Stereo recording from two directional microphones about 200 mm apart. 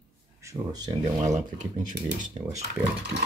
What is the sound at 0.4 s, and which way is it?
Speech, 15° right (ahead or behind).